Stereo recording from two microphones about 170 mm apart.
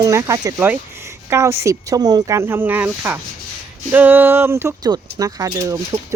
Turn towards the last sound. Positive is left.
turn(degrees=-20)  # may be behind; listen again after turning